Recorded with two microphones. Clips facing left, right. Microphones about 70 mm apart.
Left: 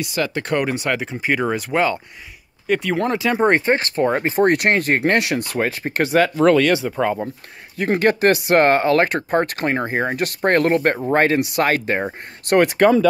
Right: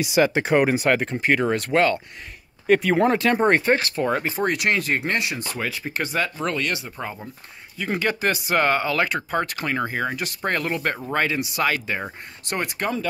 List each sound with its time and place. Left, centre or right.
0.2 s speech: centre
0.5 s speech: centre
2.7 s speech: centre
3.4 s speech: left
4.5 s speech: left
5.6 s speech: left
6.0 s speech: left
7.7 s speech: left
10.1 s speech: left
12.4 s speech: left